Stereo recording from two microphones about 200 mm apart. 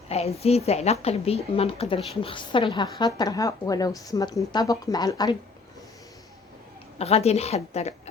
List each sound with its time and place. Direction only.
0.1 s a woman's voice: 30° left (ahead or behind)
7.0 s a woman's voice: 30° left (ahead or behind)